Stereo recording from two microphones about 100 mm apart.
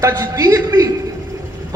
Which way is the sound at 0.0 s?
35° right (ahead or behind).